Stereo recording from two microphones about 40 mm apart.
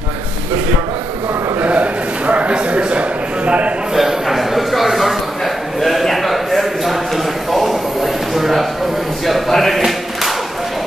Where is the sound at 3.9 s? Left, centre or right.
Centre.